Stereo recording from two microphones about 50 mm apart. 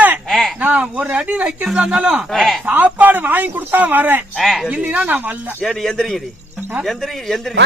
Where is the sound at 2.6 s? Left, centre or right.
Right.